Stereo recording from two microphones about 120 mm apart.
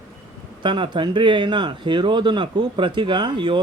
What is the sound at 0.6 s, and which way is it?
Speech, 40° right (ahead or behind).